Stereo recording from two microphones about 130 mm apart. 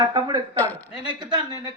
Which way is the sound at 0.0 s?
35° right (ahead or behind).